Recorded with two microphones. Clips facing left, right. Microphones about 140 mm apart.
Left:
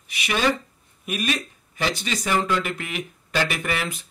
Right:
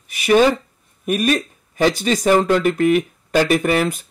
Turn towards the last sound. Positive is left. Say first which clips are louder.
# right 10 dB
turn(degrees=-45)  # may be behind; listen again after turning